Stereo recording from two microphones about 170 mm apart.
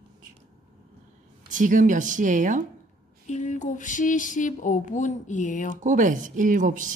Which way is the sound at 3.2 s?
45° left (ahead or behind).